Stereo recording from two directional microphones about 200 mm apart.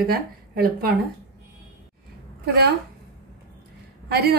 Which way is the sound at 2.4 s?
55° right (ahead or behind).